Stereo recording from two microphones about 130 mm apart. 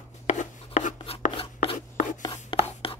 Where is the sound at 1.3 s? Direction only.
45° left (ahead or behind).